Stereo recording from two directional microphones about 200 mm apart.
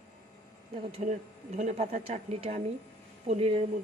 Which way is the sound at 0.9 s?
35° right (ahead or behind).